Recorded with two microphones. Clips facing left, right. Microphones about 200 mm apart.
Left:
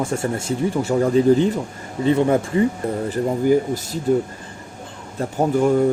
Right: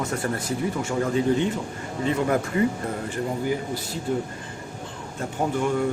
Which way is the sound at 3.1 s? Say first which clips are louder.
Left 10 dB; 45° left (ahead or behind).